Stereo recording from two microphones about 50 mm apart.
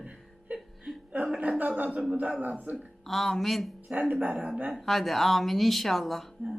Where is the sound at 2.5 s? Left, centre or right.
Right.